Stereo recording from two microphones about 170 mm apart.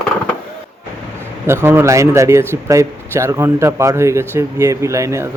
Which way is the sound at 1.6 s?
15° right (ahead or behind).